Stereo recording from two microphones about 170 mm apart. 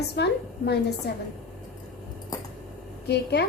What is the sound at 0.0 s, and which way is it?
A woman's voice, 75° left (ahead or behind).